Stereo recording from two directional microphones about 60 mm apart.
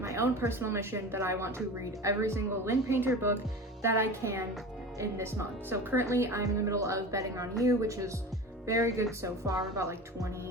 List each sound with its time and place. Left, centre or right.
0.0 s a woman's voice: right
6.4 s speech: right